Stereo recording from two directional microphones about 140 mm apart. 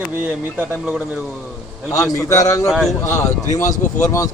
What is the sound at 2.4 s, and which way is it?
Speech, 25° left (ahead or behind).